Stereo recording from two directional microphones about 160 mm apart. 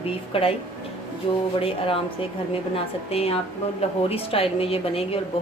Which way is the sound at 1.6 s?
35° left (ahead or behind).